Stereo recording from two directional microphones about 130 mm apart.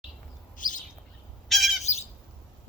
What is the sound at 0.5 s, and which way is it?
Bird, 85° left.